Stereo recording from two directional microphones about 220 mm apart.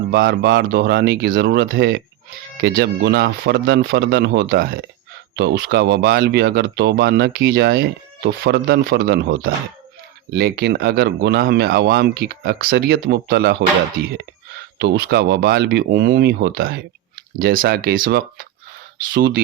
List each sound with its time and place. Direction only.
0.1 s speech: 45° right (ahead or behind)
14.8 s speech: 45° right (ahead or behind)